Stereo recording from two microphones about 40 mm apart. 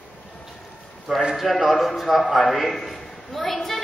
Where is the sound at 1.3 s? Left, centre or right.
Centre.